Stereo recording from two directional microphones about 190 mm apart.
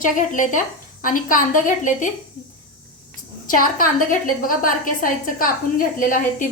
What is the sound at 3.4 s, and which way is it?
A woman's voice, 50° left (ahead or behind).